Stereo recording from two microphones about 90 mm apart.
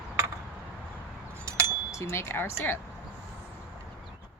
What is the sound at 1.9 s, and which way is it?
Speech, 30° left (ahead or behind).